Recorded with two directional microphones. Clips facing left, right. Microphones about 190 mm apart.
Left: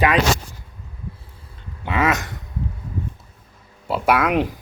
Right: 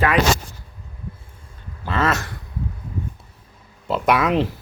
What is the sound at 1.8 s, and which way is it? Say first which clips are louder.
Speech: left 1 dB; 15° left (ahead or behind).